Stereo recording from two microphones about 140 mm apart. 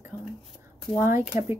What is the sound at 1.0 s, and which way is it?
Speech, 15° right (ahead or behind).